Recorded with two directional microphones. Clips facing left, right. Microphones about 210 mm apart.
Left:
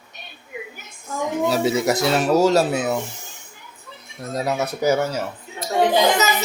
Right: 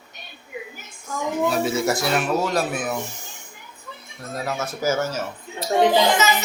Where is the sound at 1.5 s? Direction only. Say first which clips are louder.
Left 4 dB; 20° left (ahead or behind).